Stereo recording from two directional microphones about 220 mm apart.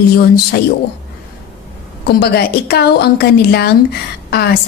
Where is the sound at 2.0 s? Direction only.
45° left (ahead or behind).